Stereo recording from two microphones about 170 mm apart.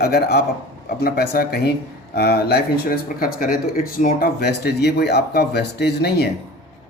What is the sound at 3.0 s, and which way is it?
Speech, 60° left (ahead or behind).